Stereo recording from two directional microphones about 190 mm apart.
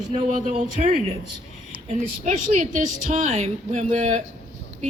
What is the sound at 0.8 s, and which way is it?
Speech, 40° right (ahead or behind).